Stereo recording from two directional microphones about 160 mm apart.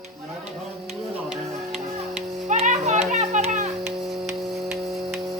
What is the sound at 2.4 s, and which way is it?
Children playing, 45° right (ahead or behind).